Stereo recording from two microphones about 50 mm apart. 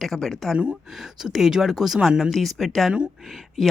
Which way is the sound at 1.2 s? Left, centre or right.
Centre.